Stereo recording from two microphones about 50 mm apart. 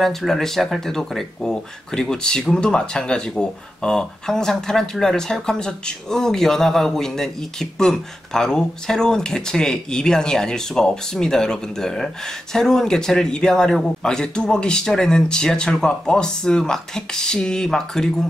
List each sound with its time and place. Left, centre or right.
0.3 s speech: centre